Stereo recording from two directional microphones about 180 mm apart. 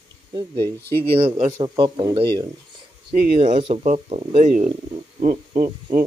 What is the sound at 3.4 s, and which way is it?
Speech, 30° right (ahead or behind).